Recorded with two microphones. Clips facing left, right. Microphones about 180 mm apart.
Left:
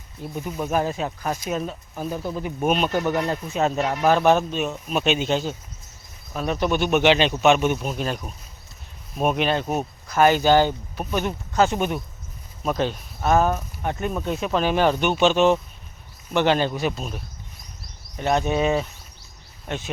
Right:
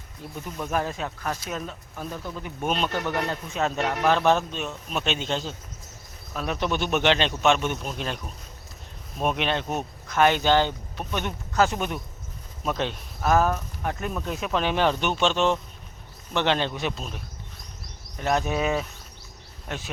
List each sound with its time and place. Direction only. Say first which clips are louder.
0.5 s speech: left 4 dB; 5° left (ahead or behind)
0.8 s speech: left 4 dB; 25° left (ahead or behind)
2.1 s speech: left 8 dB; 30° left (ahead or behind)
2.4 s speech: left 5 dB; 10° left (ahead or behind)
18.2 s speech: left 3 dB; centre (ahead or behind)